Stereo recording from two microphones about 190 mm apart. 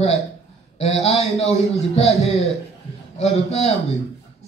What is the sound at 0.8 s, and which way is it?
Speech, 35° left (ahead or behind).